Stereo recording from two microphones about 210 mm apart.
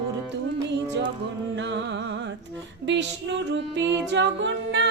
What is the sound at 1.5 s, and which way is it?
Music, 60° right (ahead or behind).